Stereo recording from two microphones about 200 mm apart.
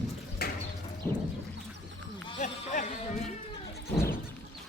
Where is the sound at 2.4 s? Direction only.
40° left (ahead or behind).